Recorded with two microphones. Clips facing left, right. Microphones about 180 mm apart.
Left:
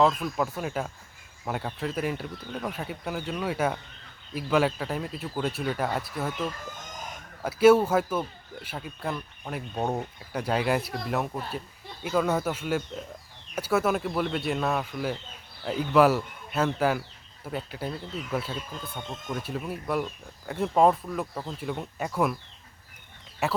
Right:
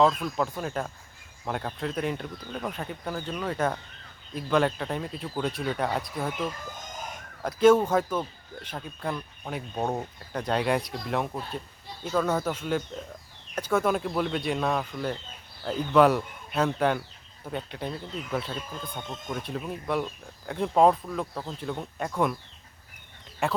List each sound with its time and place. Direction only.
0.0 s speech: 5° left (ahead or behind)
7.4 s speech: 10° left (ahead or behind)
23.4 s speech: 5° left (ahead or behind)